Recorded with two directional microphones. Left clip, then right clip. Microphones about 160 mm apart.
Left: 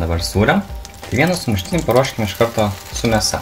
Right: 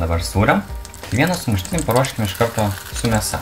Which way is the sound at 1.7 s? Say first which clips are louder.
Left 3 dB; 15° left (ahead or behind).